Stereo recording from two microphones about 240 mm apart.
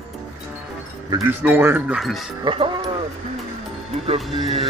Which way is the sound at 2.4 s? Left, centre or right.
Right.